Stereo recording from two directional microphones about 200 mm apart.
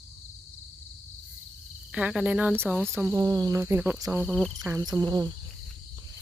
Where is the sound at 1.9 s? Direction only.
5° right (ahead or behind).